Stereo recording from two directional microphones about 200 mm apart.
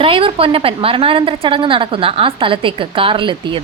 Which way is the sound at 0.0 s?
25° right (ahead or behind).